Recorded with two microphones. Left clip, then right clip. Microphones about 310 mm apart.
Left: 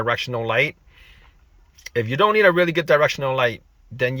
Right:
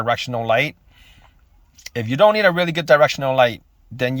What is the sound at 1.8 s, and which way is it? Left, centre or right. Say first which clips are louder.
Speech: right 4 dB; centre.